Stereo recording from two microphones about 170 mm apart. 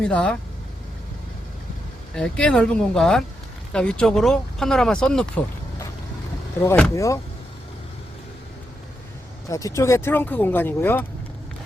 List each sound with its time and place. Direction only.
0.0 s speech: 5° left (ahead or behind)
2.1 s speech: 5° left (ahead or behind)
6.6 s speech: 15° left (ahead or behind)
9.5 s speech: 20° left (ahead or behind)